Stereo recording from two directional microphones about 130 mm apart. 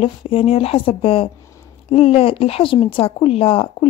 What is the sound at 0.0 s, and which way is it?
Speech, 45° left (ahead or behind).